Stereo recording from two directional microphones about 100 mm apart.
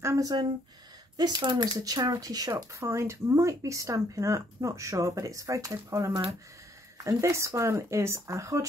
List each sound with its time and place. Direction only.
0.0 s speech: 35° right (ahead or behind)